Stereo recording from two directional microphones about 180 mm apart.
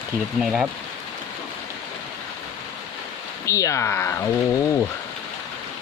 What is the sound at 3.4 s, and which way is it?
Speech, 15° left (ahead or behind).